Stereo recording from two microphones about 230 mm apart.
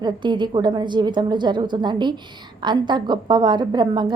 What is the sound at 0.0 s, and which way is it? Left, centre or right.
A woman's voice, centre.